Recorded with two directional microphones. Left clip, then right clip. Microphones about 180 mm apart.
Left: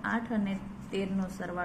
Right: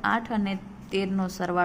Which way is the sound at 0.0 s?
70° right (ahead or behind).